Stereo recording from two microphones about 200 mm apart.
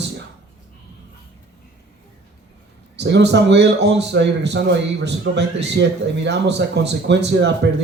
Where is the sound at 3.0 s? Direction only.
60° right (ahead or behind).